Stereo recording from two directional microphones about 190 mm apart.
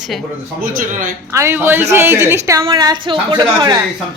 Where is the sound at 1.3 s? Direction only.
15° right (ahead or behind).